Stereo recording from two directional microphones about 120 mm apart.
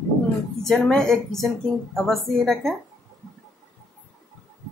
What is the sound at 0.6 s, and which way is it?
A woman's voice, 5° left (ahead or behind).